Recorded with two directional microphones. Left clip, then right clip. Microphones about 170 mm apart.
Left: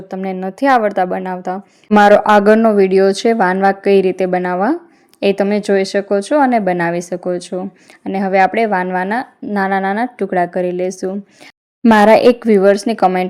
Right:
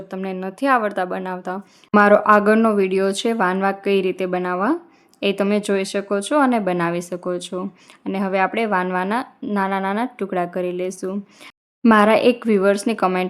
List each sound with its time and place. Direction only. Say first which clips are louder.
0.1 s a woman's voice: left 6 dB; 20° left (ahead or behind)